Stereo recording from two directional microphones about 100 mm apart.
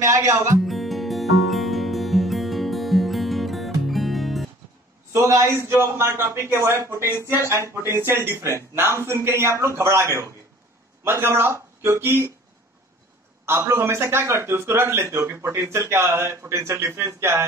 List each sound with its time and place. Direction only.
0.0 s speech: 30° right (ahead or behind)
0.7 s music: centre (ahead or behind)
5.1 s a man's voice: 30° right (ahead or behind)
13.5 s speech: 25° right (ahead or behind)